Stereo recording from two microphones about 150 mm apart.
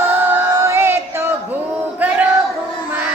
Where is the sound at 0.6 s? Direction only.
15° right (ahead or behind).